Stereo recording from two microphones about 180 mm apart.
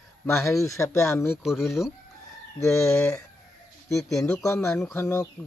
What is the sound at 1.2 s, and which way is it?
Speech, centre (ahead or behind).